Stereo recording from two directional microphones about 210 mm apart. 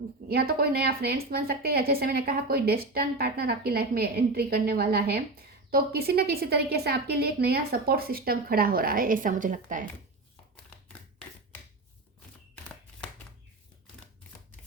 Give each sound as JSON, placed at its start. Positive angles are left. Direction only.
{"t": 0.3, "sound": "a woman's voice", "side_deg": -45}